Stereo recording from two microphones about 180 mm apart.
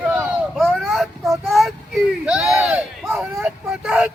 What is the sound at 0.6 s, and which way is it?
Child singing, centre (ahead or behind).